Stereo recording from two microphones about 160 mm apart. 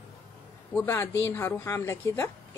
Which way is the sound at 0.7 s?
15° left (ahead or behind).